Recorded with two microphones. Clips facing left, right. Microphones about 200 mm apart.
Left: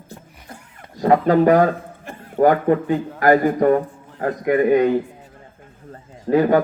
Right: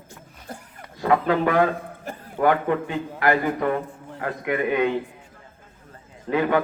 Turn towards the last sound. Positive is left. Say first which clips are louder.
# left 6 dB
turn(degrees=40)  # may be behind; listen again after turning